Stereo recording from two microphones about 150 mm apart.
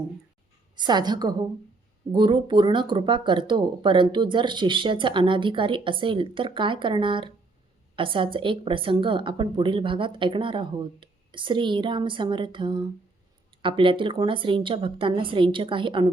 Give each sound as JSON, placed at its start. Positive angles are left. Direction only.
{"t": 0.8, "sound": "a woman's voice", "side_deg": -30}